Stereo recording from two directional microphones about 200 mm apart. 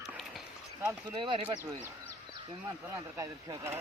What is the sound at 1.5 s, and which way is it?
Speech, 10° left (ahead or behind).